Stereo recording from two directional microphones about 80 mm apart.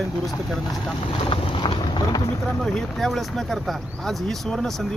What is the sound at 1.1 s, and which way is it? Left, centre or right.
Speech, left.